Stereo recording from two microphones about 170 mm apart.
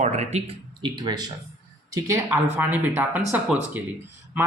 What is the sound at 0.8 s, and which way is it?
A woman's voice, 25° right (ahead or behind).